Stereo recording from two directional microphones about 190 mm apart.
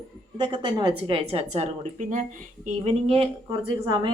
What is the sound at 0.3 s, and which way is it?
A woman's voice, 25° right (ahead or behind).